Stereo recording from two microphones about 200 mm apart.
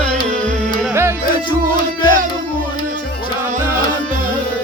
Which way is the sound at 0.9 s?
10° right (ahead or behind).